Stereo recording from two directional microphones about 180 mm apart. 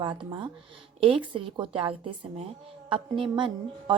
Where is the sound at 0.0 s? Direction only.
25° right (ahead or behind).